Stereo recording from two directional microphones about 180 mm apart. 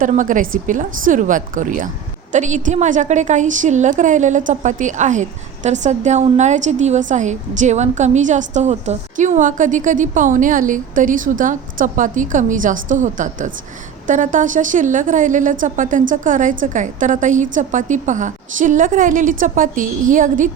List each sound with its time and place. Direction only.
0.0 s a woman's voice: 45° right (ahead or behind)